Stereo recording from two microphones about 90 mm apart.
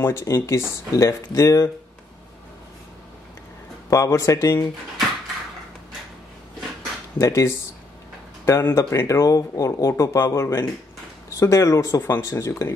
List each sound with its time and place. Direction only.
0.0 s speech: 30° left (ahead or behind)
3.9 s speech: 35° left (ahead or behind)
7.2 s speech: 35° left (ahead or behind)